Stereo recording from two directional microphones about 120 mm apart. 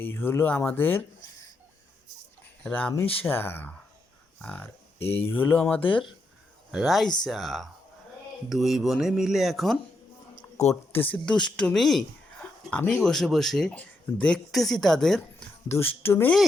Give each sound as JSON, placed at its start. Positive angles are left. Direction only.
{"t": 0.0, "sound": "speech", "side_deg": 20}
{"t": 2.6, "sound": "speech", "side_deg": 15}
{"t": 4.9, "sound": "speech", "side_deg": 55}
{"t": 5.3, "sound": "speech", "side_deg": 15}
{"t": 6.7, "sound": "speech", "side_deg": 0}
{"t": 10.3, "sound": "a sound", "side_deg": 75}
{"t": 10.9, "sound": "speech", "side_deg": 15}
{"t": 12.7, "sound": "speech", "side_deg": 15}
{"t": 13.0, "sound": "speech", "side_deg": 5}
{"t": 15.7, "sound": "speech", "side_deg": 15}